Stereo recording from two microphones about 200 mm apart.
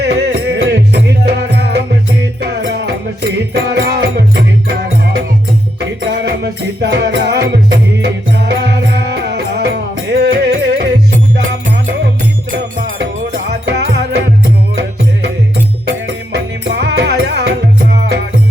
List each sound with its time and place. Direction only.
0.0 s music: 55° right (ahead or behind)
13.5 s music: 55° right (ahead or behind)
16.0 s music: 60° right (ahead or behind)